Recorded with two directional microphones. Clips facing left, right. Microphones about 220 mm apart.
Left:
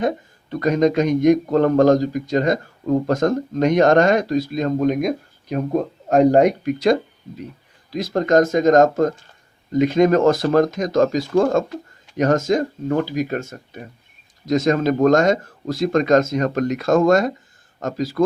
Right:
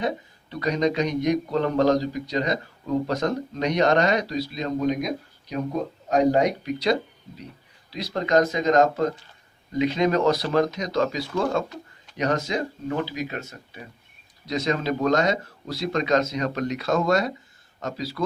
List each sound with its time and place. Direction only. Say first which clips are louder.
0.5 s a man's voice: left 6 dB; 50° left (ahead or behind)